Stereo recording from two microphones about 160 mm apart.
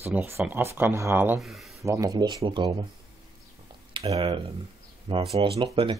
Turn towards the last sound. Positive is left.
turn(degrees=-30)  # may be behind; listen again after turning